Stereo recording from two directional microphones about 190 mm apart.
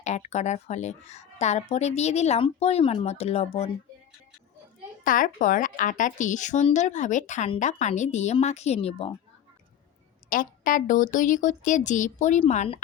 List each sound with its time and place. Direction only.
0.3 s a woman's voice: 35° left (ahead or behind)
5.0 s a woman's voice: 45° left (ahead or behind)
10.2 s a woman's voice: 45° left (ahead or behind)